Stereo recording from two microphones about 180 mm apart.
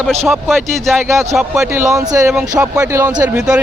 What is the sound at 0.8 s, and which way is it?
Speech, 15° right (ahead or behind).